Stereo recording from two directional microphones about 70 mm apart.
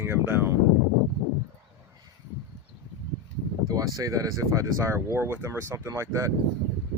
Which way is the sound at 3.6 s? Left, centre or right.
Right.